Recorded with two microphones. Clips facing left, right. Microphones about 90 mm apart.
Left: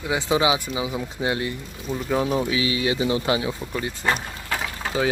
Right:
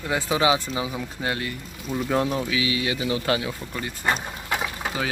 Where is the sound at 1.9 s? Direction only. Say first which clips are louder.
Even; centre (ahead or behind).